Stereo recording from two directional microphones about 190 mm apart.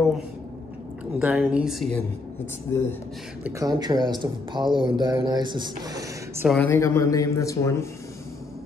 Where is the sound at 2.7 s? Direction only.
15° left (ahead or behind).